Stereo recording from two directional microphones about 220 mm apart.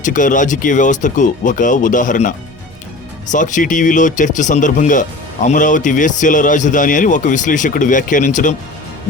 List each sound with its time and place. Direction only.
0.0 s speech: 35° left (ahead or behind)
3.3 s speech: 35° left (ahead or behind)